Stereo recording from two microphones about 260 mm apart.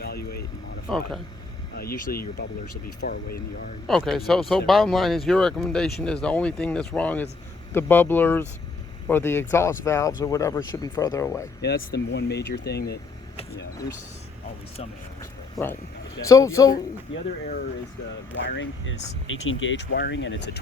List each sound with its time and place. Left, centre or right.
0.0 s vehicle: left
0.9 s speech: centre
1.7 s speech: left
3.8 s speech: centre
11.6 s speech: left
14.8 s speech: centre
18.4 s speech: left